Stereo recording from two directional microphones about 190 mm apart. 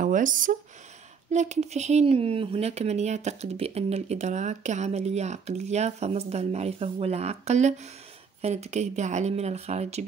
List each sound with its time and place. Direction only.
0.0 s speech: 45° right (ahead or behind)